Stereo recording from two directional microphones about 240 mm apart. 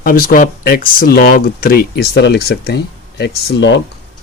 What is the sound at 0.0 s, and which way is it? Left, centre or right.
Speech, left.